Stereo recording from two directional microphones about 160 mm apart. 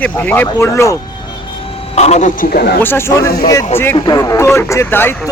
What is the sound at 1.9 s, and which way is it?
Speech, 45° left (ahead or behind).